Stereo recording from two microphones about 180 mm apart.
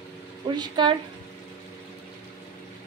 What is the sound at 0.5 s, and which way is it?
Speech, 25° right (ahead or behind).